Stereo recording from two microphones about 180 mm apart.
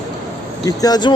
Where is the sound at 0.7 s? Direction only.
20° left (ahead or behind).